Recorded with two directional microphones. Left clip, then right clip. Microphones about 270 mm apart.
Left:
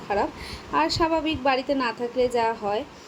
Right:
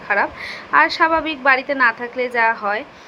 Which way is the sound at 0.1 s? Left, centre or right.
Centre.